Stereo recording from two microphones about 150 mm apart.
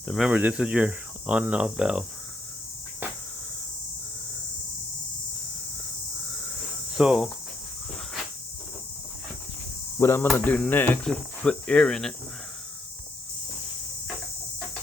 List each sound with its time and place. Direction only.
0.1 s speech: 5° right (ahead or behind)
6.9 s speech: 5° right (ahead or behind)
10.0 s speech: 15° left (ahead or behind)